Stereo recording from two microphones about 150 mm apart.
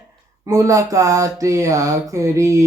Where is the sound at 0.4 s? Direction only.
20° right (ahead or behind).